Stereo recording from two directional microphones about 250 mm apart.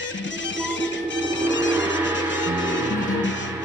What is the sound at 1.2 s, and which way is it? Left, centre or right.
Music, left.